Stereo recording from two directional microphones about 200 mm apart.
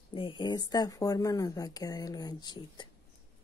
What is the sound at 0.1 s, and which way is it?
Speech, 25° left (ahead or behind).